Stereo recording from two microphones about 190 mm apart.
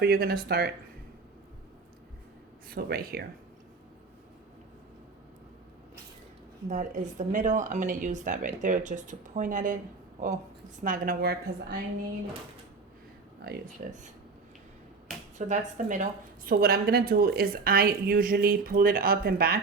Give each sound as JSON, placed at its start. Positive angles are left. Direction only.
{"t": 0.0, "sound": "speech", "side_deg": -55}
{"t": 2.6, "sound": "a woman's voice", "side_deg": -55}
{"t": 6.7, "sound": "speech", "side_deg": -40}
{"t": 10.8, "sound": "a woman's voice", "side_deg": -45}
{"t": 13.4, "sound": "speech", "side_deg": -55}
{"t": 15.4, "sound": "a woman's voice", "side_deg": -40}